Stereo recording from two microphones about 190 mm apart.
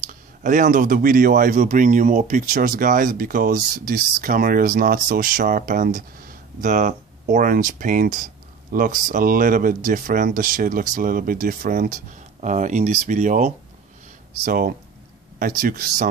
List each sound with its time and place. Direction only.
0.0 s speech: 40° right (ahead or behind)